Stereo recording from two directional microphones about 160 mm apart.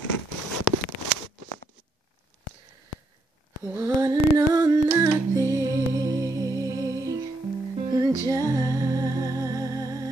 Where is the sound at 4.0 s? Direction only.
20° right (ahead or behind).